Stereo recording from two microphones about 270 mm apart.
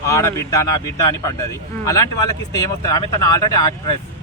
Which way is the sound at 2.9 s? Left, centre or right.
Centre.